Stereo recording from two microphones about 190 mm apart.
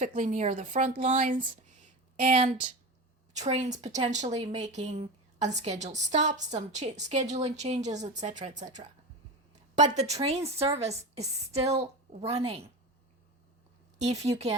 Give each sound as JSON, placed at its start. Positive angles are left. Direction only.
{"t": 0.0, "sound": "a woman's voice", "side_deg": -40}
{"t": 14.0, "sound": "a woman's voice", "side_deg": -35}